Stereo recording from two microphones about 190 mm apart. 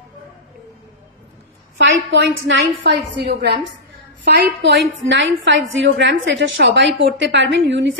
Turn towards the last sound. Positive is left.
turn(degrees=-75)  # may be behind; listen again after turning